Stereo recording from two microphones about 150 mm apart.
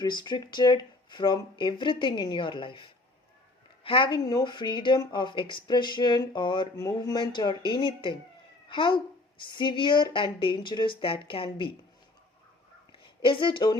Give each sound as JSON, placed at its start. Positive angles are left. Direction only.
{"t": 0.0, "sound": "speech", "side_deg": 30}
{"t": 3.8, "sound": "a child's voice", "side_deg": 35}
{"t": 13.0, "sound": "a woman's voice", "side_deg": 35}